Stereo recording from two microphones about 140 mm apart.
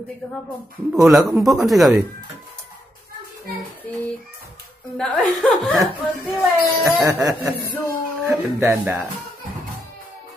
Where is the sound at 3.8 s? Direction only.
10° left (ahead or behind).